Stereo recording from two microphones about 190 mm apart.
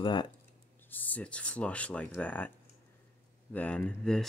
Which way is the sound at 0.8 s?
10° left (ahead or behind).